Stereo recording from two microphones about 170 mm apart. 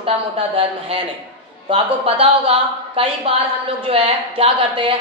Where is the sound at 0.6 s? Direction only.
35° right (ahead or behind).